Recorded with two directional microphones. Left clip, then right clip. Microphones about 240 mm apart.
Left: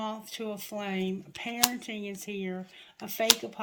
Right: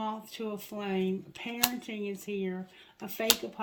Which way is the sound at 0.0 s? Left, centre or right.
Left.